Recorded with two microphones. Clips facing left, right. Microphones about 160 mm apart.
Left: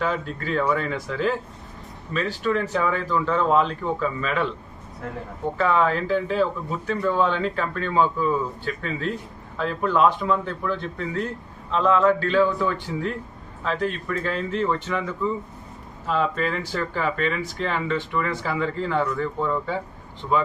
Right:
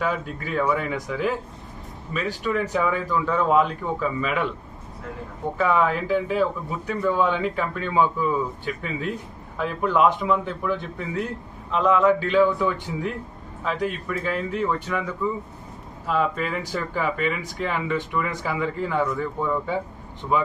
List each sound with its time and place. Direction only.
0.0 s speech: 10° right (ahead or behind)
5.5 s speech: centre (ahead or behind)